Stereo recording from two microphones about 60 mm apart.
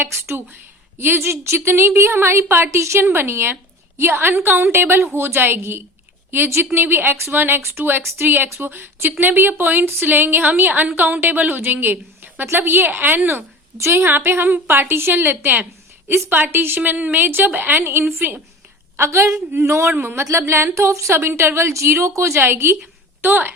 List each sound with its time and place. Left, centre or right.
0.0 s a woman's voice: right
18.9 s a woman's voice: right
21.1 s a woman's voice: right